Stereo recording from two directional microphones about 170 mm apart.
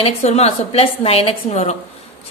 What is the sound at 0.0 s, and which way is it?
A woman's voice, 40° left (ahead or behind).